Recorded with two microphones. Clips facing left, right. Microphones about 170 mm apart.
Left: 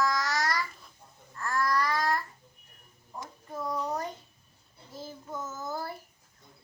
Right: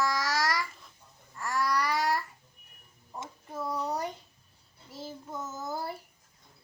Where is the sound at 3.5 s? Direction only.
5° right (ahead or behind).